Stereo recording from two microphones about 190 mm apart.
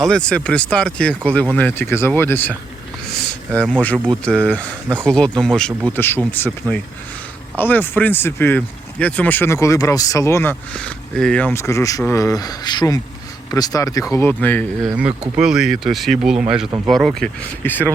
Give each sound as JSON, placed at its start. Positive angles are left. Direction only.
{"t": 0.1, "sound": "speech", "side_deg": 5}
{"t": 3.7, "sound": "speech", "side_deg": 5}
{"t": 14.8, "sound": "speech", "side_deg": -5}